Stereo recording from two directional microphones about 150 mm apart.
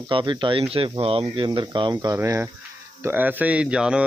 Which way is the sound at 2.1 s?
15° right (ahead or behind).